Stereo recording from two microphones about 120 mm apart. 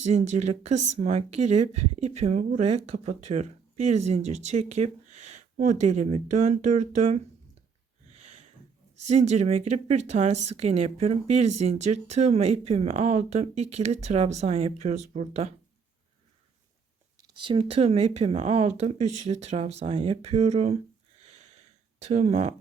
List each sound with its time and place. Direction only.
0.1 s speech: 70° right (ahead or behind)
8.1 s a sound: 55° right (ahead or behind)
9.0 s speech: 65° right (ahead or behind)
17.2 s speech: 35° right (ahead or behind); by 20.7 s 65° right (ahead or behind)
21.2 s sniff: 65° right (ahead or behind)